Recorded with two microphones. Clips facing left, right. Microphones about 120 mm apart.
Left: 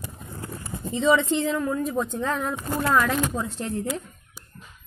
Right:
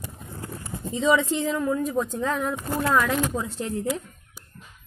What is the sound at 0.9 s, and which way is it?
Speech, 5° right (ahead or behind).